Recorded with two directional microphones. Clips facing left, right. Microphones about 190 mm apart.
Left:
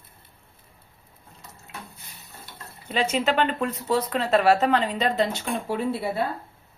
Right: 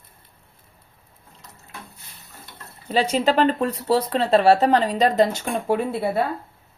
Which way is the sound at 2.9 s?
35° right (ahead or behind).